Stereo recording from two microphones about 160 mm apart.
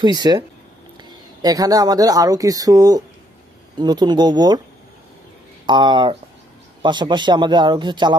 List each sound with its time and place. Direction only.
0.0 s speech: 25° right (ahead or behind)
5.7 s speech: 30° right (ahead or behind)